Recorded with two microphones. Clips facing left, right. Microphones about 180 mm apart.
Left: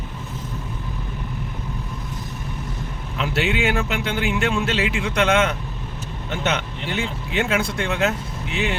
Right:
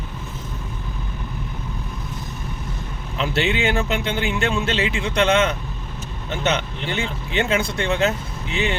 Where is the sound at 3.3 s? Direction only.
5° left (ahead or behind).